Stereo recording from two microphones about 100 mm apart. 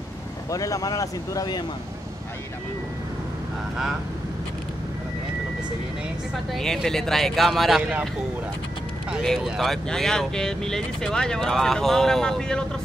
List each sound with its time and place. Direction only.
0.5 s speech: 35° left (ahead or behind)
6.5 s speech: 5° left (ahead or behind)
9.2 s speech: 5° left (ahead or behind)